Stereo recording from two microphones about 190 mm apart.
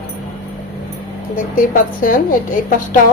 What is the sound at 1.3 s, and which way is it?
A woman's voice, 45° left (ahead or behind).